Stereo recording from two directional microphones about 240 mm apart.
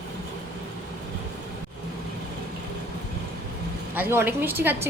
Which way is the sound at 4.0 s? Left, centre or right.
Centre.